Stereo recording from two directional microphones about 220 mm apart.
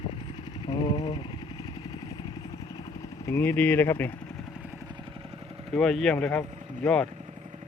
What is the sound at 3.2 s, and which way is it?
Speech, 10° left (ahead or behind).